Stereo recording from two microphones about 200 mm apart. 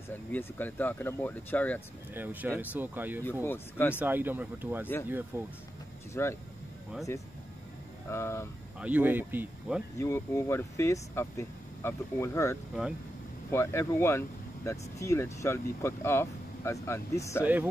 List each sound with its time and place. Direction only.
0.3 s speech: 10° left (ahead or behind)
2.1 s speech: 10° right (ahead or behind)
3.4 s speech: 10° left (ahead or behind)
4.0 s speech: 10° right (ahead or behind)
6.2 s speech: 10° left (ahead or behind)
8.1 s speech: 15° left (ahead or behind)
8.7 s speech: 5° right (ahead or behind)
9.9 s speech: 15° left (ahead or behind)
17.4 s speech: 10° right (ahead or behind)